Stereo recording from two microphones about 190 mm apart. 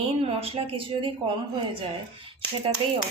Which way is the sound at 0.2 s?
30° right (ahead or behind).